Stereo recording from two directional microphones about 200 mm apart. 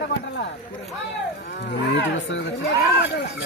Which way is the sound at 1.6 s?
65° left (ahead or behind).